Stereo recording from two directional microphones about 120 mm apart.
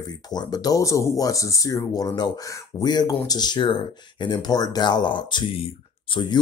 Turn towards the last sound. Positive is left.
turn(degrees=40)  # may be behind; listen again after turning